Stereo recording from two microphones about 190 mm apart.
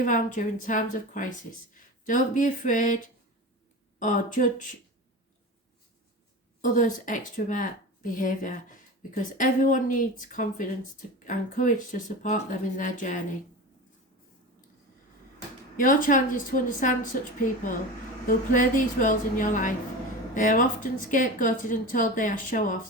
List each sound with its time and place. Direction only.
0.0 s speech: 45° left (ahead or behind)
6.6 s speech: 45° left (ahead or behind)
15.8 s speech: 45° left (ahead or behind)
18.3 s speech: 45° left (ahead or behind)